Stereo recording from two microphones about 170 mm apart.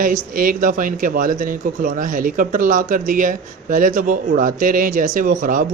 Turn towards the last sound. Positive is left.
turn(degrees=-50)  # may be behind; listen again after turning